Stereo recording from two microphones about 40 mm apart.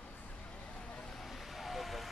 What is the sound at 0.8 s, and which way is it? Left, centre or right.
Vehicle, left.